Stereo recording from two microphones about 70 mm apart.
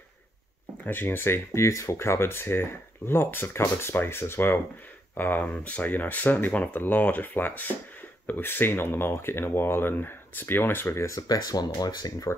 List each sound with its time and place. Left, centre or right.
0.8 s speech: left
11.1 s speech: left